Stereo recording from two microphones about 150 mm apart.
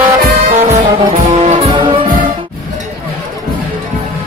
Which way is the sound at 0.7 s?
50° right (ahead or behind).